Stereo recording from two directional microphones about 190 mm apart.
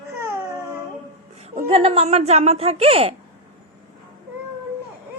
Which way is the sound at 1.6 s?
30° right (ahead or behind).